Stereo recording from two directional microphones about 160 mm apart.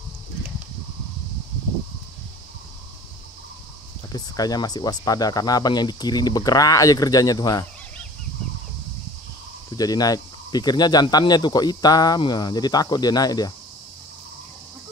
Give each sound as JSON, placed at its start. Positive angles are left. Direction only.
{"t": 4.1, "sound": "speech", "side_deg": 25}
{"t": 9.7, "sound": "speech", "side_deg": 25}